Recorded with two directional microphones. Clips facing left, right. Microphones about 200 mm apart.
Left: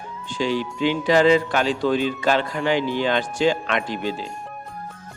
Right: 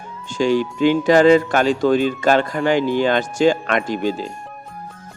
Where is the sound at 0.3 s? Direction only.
45° right (ahead or behind).